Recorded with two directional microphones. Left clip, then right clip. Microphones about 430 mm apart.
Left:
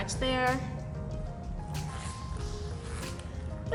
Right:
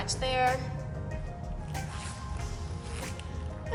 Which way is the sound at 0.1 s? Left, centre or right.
Centre.